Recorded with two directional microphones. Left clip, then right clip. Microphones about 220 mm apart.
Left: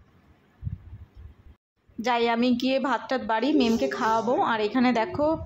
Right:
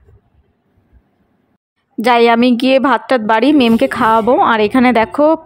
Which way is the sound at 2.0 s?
45° right (ahead or behind).